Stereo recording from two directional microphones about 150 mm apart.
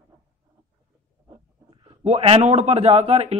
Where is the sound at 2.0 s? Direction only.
40° right (ahead or behind).